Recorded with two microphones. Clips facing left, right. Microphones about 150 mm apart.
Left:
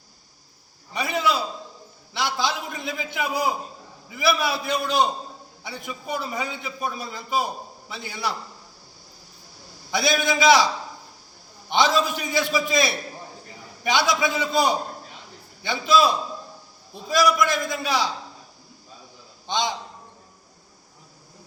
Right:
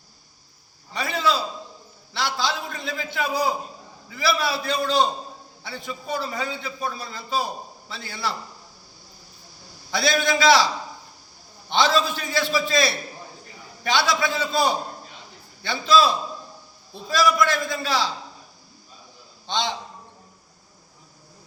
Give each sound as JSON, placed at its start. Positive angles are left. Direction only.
{"t": 0.9, "sound": "a sound", "side_deg": 15}
{"t": 4.1, "sound": "a man's voice", "side_deg": 20}
{"t": 9.9, "sound": "a man's voice", "side_deg": 15}
{"t": 11.7, "sound": "a man's voice", "side_deg": 15}
{"t": 19.5, "sound": "a man's voice", "side_deg": 15}